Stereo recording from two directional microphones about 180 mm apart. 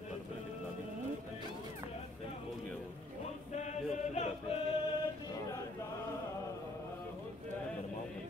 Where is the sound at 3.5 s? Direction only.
40° left (ahead or behind).